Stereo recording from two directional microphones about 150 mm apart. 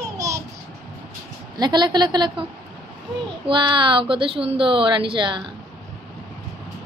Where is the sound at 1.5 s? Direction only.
30° right (ahead or behind).